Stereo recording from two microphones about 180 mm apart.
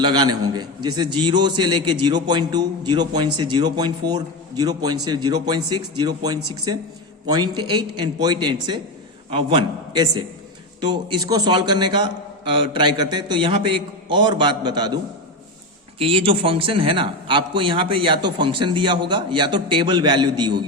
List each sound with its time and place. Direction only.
0.0 s a man's voice: 25° right (ahead or behind)
16.0 s a man's voice: 30° right (ahead or behind)